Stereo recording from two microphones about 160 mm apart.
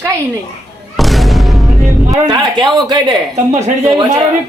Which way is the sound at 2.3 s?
25° right (ahead or behind).